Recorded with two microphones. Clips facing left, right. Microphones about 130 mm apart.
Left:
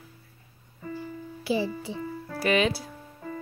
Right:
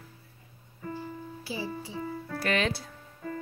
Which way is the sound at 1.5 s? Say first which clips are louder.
Left 10 dB; 90° left.